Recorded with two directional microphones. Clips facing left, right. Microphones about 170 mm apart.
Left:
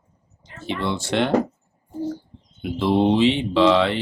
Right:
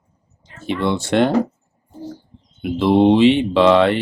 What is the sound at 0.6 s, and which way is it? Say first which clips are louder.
Speech: right 5 dB; 55° right (ahead or behind).